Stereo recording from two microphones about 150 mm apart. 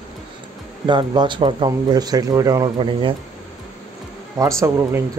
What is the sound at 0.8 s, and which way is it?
Speech, 30° right (ahead or behind).